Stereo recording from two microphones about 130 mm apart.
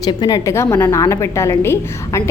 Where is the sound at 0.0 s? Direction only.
30° left (ahead or behind).